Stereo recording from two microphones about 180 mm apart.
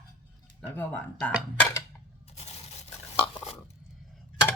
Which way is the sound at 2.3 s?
35° left (ahead or behind).